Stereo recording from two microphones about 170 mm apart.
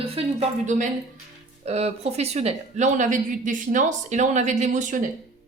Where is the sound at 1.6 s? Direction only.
40° right (ahead or behind).